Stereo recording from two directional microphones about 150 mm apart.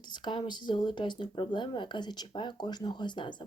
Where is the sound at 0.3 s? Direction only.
30° left (ahead or behind).